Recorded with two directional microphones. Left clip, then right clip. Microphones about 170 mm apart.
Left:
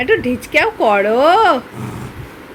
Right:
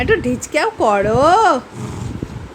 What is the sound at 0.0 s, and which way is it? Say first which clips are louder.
Speech: left 1 dB; 10° right (ahead or behind).